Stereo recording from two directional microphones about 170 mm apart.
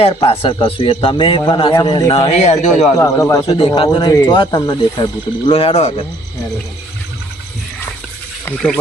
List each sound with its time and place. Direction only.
0.0 s a man's voice: 35° left (ahead or behind)
2.3 s a man's voice: 40° left (ahead or behind)
2.9 s a man's voice: 15° left (ahead or behind)
3.4 s a man's voice: 35° left (ahead or behind)
8.4 s speech: 5° left (ahead or behind)